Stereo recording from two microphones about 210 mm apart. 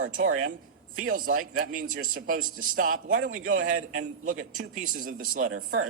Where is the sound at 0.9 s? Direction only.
40° right (ahead or behind).